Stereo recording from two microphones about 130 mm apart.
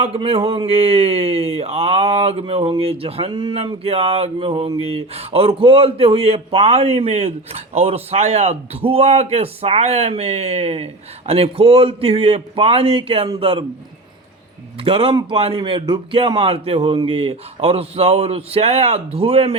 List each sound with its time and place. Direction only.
0.0 s a man's voice: 50° right (ahead or behind)
14.8 s a man's voice: 45° right (ahead or behind)